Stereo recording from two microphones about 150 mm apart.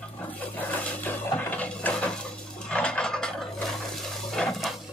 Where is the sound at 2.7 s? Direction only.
5° left (ahead or behind).